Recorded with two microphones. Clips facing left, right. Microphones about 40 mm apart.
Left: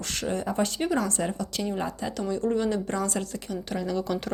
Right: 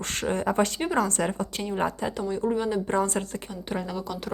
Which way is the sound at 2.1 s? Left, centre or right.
Right.